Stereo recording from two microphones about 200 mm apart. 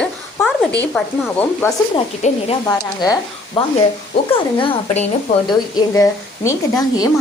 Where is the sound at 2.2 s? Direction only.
35° left (ahead or behind).